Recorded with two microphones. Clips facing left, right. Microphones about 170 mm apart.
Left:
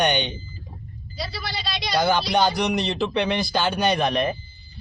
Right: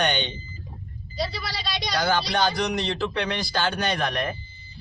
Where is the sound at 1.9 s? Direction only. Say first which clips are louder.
Left 4 dB; 20° left (ahead or behind).